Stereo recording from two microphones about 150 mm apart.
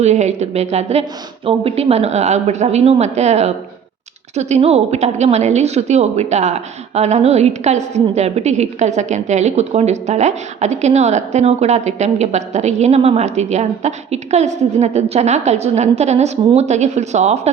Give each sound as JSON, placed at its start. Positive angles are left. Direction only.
{"t": 0.0, "sound": "a woman's voice", "side_deg": -50}